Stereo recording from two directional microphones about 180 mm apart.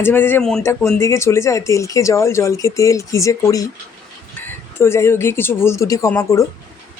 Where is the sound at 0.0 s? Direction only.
10° left (ahead or behind).